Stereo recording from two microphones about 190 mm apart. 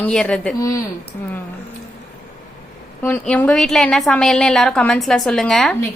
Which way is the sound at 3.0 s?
10° left (ahead or behind).